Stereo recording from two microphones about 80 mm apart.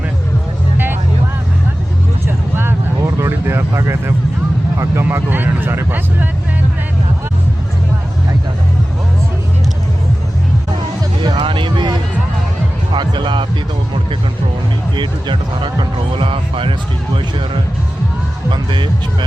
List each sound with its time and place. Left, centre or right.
2.2 s vehicle: right
5.1 s speech: right
11.2 s music: right
12.9 s music: right
14.9 s speech: right
18.5 s speech: right